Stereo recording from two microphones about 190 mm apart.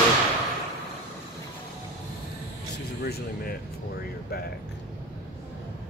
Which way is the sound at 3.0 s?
50° left (ahead or behind).